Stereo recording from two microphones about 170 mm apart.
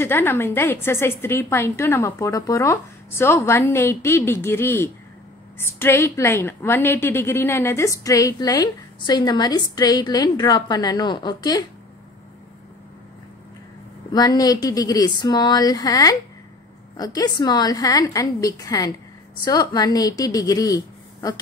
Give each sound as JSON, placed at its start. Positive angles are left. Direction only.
{"t": 0.0, "sound": "a woman's voice", "side_deg": 10}
{"t": 14.1, "sound": "a woman's voice", "side_deg": 20}